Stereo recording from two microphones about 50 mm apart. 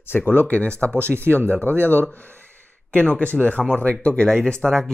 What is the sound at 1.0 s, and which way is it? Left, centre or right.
Speech, right.